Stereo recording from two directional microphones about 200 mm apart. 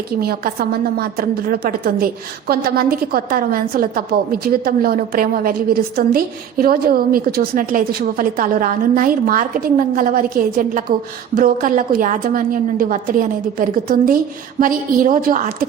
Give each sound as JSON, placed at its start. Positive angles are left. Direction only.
{"t": 0.2, "sound": "a woman's voice", "side_deg": -50}